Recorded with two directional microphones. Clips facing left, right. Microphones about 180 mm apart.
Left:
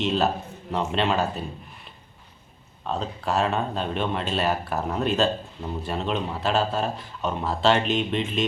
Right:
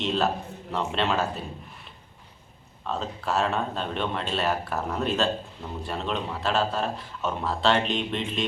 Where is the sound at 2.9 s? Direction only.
Centre (ahead or behind).